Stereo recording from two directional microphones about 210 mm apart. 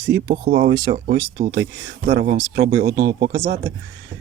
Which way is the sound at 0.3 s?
45° right (ahead or behind).